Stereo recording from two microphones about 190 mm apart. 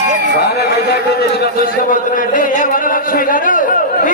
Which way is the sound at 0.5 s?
60° left (ahead or behind).